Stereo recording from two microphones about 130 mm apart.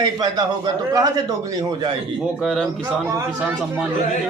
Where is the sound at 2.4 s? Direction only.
Centre (ahead or behind).